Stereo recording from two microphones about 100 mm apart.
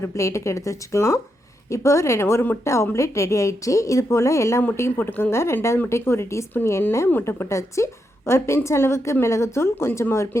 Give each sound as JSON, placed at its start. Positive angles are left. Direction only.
{"t": 0.0, "sound": "a woman's voice", "side_deg": 30}